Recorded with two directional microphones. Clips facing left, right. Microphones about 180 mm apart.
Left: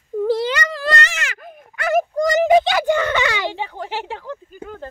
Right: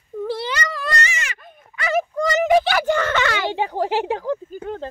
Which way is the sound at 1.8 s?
45° left (ahead or behind).